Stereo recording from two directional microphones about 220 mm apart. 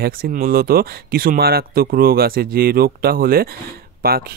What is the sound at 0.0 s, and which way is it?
Speech, 40° right (ahead or behind).